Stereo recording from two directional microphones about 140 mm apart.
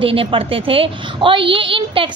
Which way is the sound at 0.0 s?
40° right (ahead or behind).